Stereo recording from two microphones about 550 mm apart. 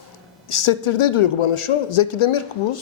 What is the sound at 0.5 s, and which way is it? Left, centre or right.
A man's voice, left.